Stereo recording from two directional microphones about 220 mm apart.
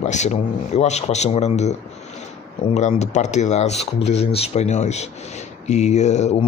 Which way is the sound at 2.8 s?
30° left (ahead or behind).